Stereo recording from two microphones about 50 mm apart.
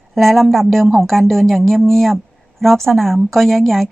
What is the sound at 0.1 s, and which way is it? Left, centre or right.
A woman's voice, centre.